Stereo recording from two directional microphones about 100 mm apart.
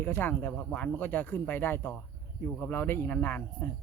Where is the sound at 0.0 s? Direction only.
20° left (ahead or behind).